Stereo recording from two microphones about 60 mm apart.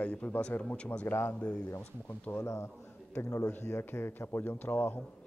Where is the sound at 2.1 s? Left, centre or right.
Left.